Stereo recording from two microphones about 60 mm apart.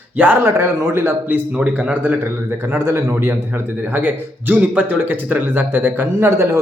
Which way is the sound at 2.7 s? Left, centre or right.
Right.